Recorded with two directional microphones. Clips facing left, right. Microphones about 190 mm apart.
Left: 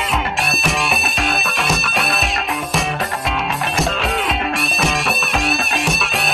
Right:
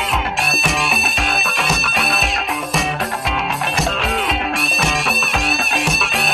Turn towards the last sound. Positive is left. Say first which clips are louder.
# even
turn(degrees=0)  # may be behind; listen again after turning